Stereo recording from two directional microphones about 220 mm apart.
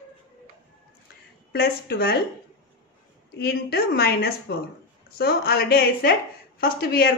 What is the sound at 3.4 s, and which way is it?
Speech, 45° left (ahead or behind).